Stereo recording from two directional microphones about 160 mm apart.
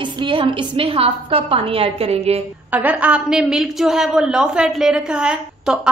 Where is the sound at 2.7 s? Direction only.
10° right (ahead or behind).